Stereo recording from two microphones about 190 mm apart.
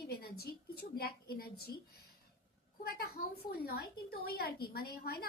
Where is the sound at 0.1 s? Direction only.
55° left (ahead or behind).